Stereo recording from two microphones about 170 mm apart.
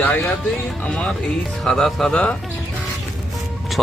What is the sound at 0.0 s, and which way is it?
Speech, 10° left (ahead or behind).